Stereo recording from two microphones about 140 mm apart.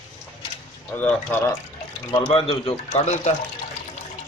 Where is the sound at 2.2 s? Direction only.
45° left (ahead or behind).